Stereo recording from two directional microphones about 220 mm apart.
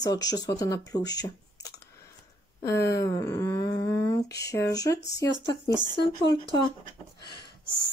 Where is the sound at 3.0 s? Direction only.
15° left (ahead or behind).